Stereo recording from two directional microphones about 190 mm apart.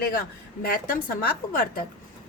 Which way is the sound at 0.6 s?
50° left (ahead or behind).